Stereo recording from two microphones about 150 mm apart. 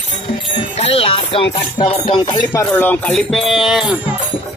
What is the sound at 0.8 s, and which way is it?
Music, 45° left (ahead or behind).